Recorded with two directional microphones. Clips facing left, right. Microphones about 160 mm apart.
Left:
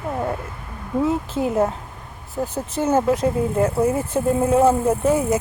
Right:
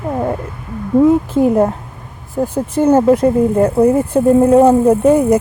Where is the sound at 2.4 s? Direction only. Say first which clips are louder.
Right 8 dB; 10° right (ahead or behind).